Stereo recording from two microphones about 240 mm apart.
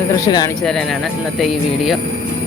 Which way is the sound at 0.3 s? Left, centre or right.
Centre.